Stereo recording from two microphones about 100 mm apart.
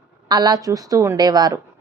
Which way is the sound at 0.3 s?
45° right (ahead or behind).